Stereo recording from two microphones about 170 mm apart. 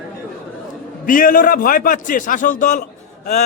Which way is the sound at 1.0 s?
55° left (ahead or behind).